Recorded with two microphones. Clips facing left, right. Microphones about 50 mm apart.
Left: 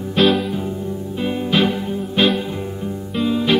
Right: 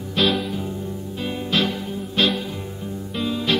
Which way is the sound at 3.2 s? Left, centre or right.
Centre.